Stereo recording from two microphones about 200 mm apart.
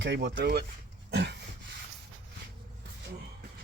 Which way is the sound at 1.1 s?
60° right (ahead or behind).